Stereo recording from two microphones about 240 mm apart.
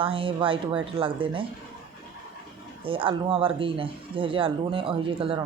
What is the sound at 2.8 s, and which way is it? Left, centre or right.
Speech, right.